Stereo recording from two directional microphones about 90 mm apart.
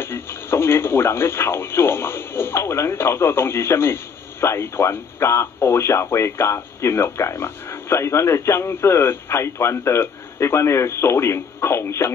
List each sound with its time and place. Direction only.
0.0 s speech: 25° left (ahead or behind)